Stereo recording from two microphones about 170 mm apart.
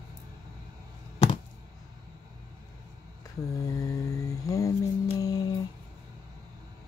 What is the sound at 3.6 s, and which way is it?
Music, 20° left (ahead or behind).